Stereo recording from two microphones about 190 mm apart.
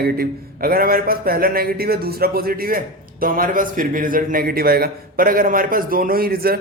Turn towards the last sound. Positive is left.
turn(degrees=-50)  # may be behind; listen again after turning